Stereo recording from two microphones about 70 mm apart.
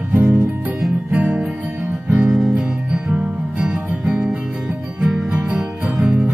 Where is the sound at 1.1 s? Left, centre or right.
Centre.